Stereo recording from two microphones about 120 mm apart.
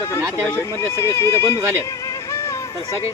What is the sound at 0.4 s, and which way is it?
Speech, 20° left (ahead or behind).